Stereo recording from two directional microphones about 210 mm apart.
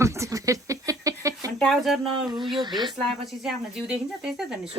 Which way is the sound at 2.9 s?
Centre (ahead or behind).